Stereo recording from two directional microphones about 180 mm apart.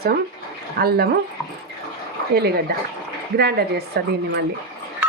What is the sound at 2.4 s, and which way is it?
A woman's voice, 60° right (ahead or behind).